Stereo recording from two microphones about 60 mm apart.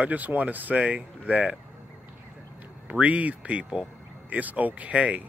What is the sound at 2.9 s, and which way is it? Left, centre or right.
Speech, right.